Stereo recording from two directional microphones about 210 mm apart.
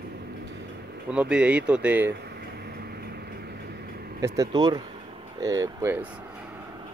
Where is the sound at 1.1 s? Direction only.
5° right (ahead or behind).